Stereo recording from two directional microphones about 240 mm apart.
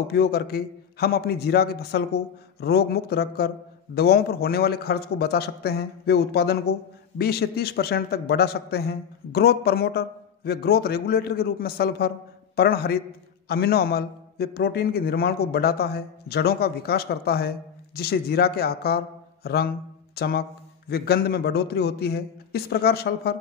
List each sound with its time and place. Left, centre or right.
0.1 s a man's voice: left